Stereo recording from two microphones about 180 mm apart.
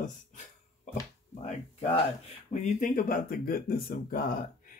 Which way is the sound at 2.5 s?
45° left (ahead or behind).